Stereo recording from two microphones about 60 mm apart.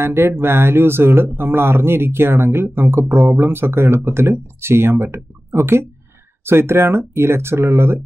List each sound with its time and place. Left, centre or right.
0.0 s speech: right